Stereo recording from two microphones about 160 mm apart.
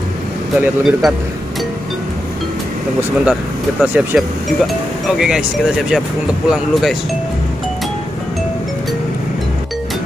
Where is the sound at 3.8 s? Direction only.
5° right (ahead or behind).